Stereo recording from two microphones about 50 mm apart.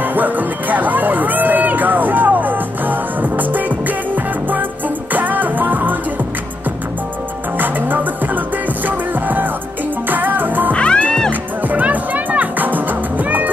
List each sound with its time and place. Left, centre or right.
0.0 s music: right
7.5 s music: right
10.7 s music: left
11.7 s music: right